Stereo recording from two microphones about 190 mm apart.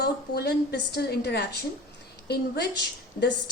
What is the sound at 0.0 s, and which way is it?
A woman's voice, 60° left (ahead or behind).